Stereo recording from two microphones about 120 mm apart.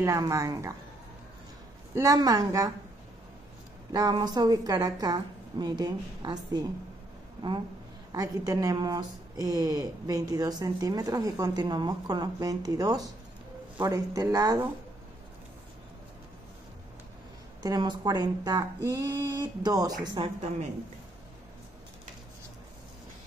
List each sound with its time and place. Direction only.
0.0 s a woman's voice: 25° right (ahead or behind)
2.0 s a woman's voice: 30° right (ahead or behind)
3.9 s speech: 35° right (ahead or behind)
8.1 s speech: 30° right (ahead or behind)
17.6 s speech: 35° right (ahead or behind)